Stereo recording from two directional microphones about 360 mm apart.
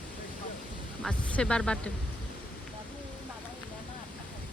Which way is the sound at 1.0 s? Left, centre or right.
Centre.